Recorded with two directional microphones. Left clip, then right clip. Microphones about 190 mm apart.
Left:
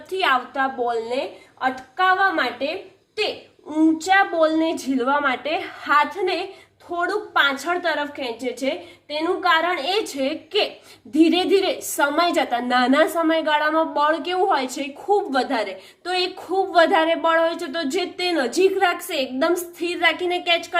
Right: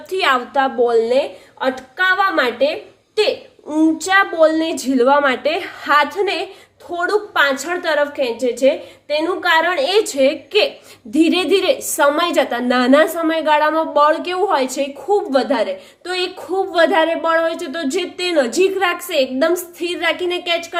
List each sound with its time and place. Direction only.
0.1 s a woman's voice: 25° right (ahead or behind)
3.9 s a woman's voice: 15° right (ahead or behind)